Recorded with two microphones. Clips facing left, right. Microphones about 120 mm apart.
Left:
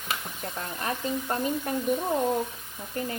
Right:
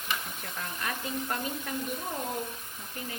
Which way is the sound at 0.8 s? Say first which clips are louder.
Left 5 dB; 30° left (ahead or behind).